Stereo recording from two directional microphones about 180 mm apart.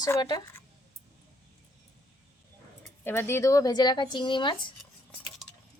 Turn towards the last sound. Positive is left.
turn(degrees=25)  # may be behind; listen again after turning